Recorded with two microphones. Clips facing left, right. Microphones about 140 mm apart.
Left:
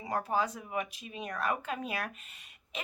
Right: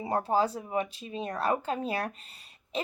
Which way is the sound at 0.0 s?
30° right (ahead or behind).